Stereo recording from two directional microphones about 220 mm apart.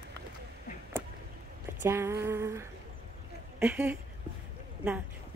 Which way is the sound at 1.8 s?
10° right (ahead or behind).